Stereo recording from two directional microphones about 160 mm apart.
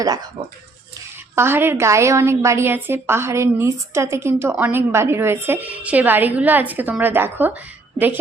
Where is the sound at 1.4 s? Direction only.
15° right (ahead or behind).